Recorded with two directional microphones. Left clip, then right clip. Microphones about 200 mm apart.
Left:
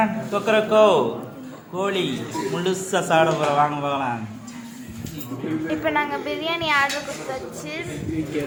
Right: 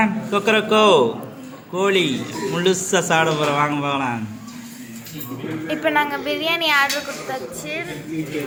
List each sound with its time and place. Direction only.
0.0 s a man's voice: 10° right (ahead or behind)
5.6 s speech: centre (ahead or behind)